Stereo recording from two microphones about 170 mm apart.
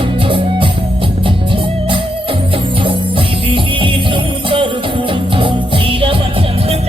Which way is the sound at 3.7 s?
30° right (ahead or behind).